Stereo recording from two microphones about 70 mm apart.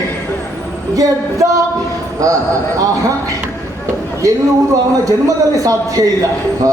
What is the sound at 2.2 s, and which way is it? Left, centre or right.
Speech, right.